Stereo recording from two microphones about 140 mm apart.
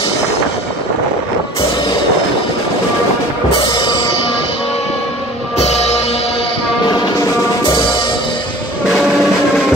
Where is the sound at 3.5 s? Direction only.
35° left (ahead or behind).